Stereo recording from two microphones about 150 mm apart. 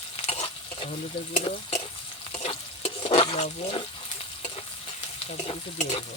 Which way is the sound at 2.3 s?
40° left (ahead or behind).